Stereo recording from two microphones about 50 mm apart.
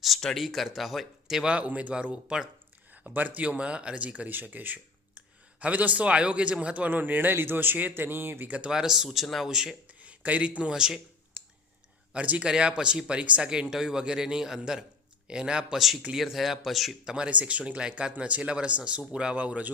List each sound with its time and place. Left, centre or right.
0.3 s speech: centre
1.5 s speech: right
3.1 s speech: right
4.3 s a man's voice: right
8.4 s speech: right
8.7 s speech: centre
9.5 s speech: centre
9.8 s speech: right
10.7 s speech: centre
12.1 s speech: right
12.4 s speech: centre
15.8 s speech: centre
17.1 s speech: centre